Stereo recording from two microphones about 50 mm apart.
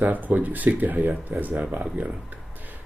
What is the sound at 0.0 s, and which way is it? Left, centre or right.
Speech, right.